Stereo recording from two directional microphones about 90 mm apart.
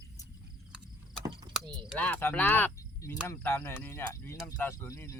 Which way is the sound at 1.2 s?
60° right (ahead or behind).